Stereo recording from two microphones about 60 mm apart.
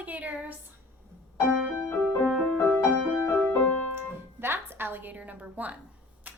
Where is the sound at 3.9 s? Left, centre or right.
Right.